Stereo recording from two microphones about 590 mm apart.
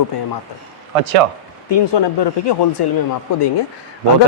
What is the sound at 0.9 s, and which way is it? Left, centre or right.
Speech, right.